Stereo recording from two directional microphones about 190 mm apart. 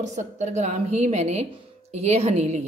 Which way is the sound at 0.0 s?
40° right (ahead or behind).